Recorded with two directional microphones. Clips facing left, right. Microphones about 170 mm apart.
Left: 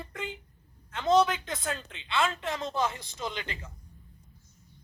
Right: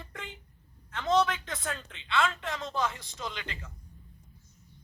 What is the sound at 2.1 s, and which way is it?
Speech, 20° left (ahead or behind).